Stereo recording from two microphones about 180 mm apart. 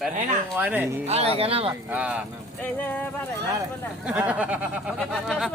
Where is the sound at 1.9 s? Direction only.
5° right (ahead or behind).